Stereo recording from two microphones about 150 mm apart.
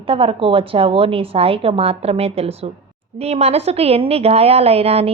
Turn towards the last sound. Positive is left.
turn(degrees=-40)  # may be behind; listen again after turning